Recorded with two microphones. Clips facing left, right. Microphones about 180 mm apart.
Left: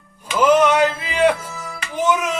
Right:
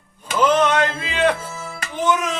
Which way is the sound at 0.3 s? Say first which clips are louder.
Left 3 dB; 10° left (ahead or behind).